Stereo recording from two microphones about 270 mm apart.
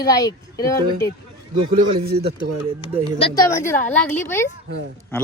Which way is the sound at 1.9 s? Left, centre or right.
Right.